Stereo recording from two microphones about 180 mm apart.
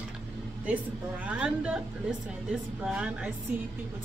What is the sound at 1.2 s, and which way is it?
Speech, 5° right (ahead or behind).